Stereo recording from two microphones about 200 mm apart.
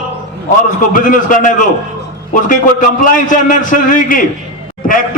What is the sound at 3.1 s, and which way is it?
A man's voice, 40° left (ahead or behind).